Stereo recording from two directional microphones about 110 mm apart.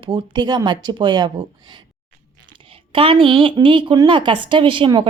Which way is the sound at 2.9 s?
50° right (ahead or behind).